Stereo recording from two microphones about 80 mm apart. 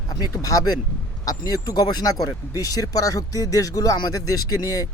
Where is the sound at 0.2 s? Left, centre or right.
Left.